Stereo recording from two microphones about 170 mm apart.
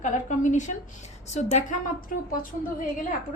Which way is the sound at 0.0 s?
50° left (ahead or behind).